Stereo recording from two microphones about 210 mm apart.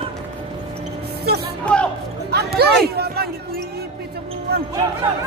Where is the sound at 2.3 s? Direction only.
50° right (ahead or behind).